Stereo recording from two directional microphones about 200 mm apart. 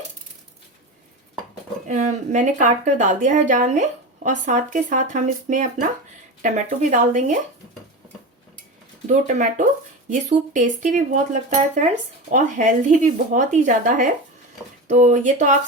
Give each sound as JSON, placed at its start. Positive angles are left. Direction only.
{"t": 1.9, "sound": "a woman's voice", "side_deg": -40}
{"t": 9.0, "sound": "a woman's voice", "side_deg": -40}